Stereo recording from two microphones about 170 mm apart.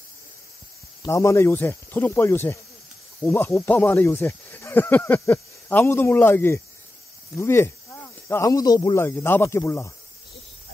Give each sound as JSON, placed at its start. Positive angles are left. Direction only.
{"t": 1.0, "sound": "speech", "side_deg": 15}